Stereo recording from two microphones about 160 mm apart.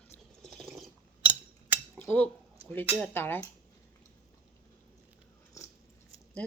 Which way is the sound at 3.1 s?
15° left (ahead or behind).